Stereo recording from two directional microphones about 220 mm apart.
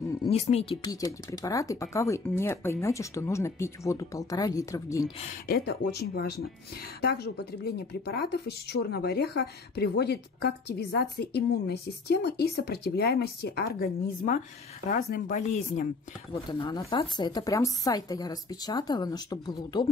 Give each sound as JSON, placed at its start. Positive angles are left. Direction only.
{"t": 0.3, "sound": "speech", "side_deg": 25}
{"t": 0.8, "sound": "speech", "side_deg": 15}
{"t": 5.5, "sound": "speech", "side_deg": 45}
{"t": 16.3, "sound": "speech", "side_deg": 20}